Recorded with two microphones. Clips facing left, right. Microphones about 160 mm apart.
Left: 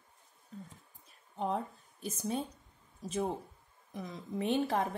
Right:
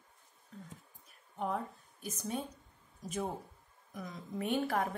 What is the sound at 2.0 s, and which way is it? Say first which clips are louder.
Speech: left 3 dB; 30° left (ahead or behind).